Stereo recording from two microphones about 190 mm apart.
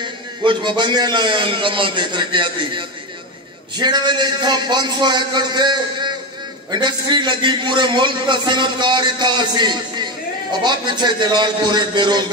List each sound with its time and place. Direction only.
0.0 s a man's voice: 25° right (ahead or behind)